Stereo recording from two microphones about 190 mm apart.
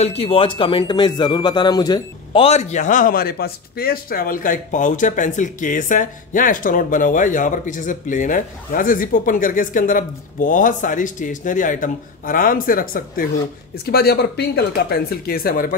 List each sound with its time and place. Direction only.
0.0 s speech: 30° left (ahead or behind); by 15.7 s 50° left (ahead or behind)